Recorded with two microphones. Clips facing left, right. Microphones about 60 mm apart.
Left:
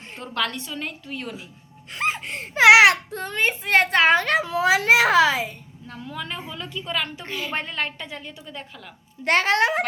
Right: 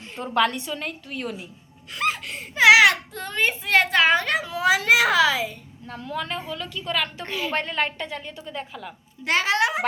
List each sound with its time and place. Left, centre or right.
0.2 s a woman's voice: centre
0.7 s a woman's voice: centre
1.9 s a sound: left
2.3 s a sound: left
2.6 s baby cry: left
3.2 s a child's voice: left
5.9 s a woman's voice: centre
9.2 s a child's voice: left